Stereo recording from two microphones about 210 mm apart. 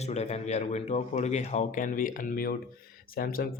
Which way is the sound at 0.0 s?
30° left (ahead or behind).